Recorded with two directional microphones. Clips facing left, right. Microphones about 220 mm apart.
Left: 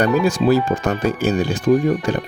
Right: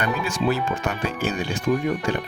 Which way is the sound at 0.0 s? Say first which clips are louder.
Left 8 dB; 35° left (ahead or behind).